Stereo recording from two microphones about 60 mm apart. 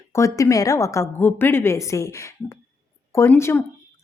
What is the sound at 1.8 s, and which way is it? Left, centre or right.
Speech, left.